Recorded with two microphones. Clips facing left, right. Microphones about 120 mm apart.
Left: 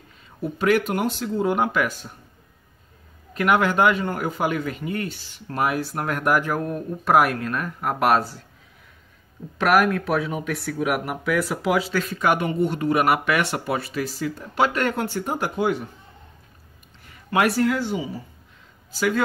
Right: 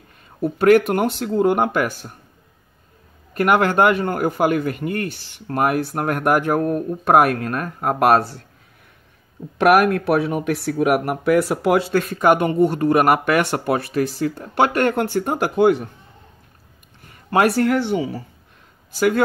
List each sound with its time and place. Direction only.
0.4 s speech: 55° right (ahead or behind)
3.3 s a man's voice: 55° right (ahead or behind)
9.6 s speech: 60° right (ahead or behind)
17.0 s a sound: 45° right (ahead or behind)
17.6 s speech: 65° right (ahead or behind)
18.9 s speech: 55° right (ahead or behind)